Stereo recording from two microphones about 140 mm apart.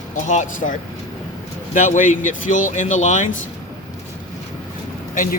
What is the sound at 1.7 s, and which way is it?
Speech, 65° left (ahead or behind).